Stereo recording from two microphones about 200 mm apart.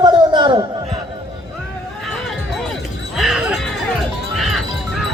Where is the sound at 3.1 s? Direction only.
Centre (ahead or behind).